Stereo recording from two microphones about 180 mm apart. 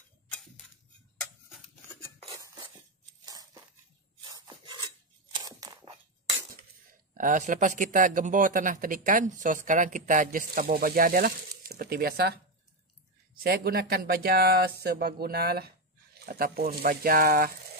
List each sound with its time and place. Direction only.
2.2 s dishes: 20° right (ahead or behind)
3.3 s a sound: 20° right (ahead or behind)
4.2 s filing: 25° right (ahead or behind)
7.2 s speech: 45° right (ahead or behind)